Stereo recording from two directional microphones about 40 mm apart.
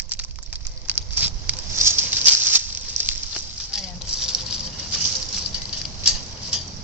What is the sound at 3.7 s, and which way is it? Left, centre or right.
Patter, centre.